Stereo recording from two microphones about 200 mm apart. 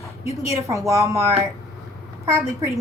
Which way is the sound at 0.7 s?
15° right (ahead or behind).